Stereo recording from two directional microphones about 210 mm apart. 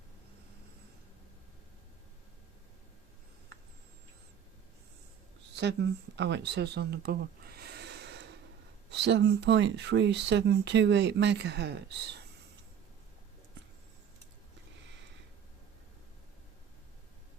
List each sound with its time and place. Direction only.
5.5 s speech: 55° right (ahead or behind)